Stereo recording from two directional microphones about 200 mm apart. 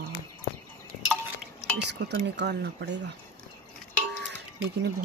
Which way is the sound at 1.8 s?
60° right (ahead or behind).